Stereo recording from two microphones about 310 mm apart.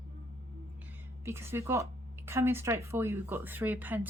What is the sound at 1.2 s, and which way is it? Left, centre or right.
Speech, centre.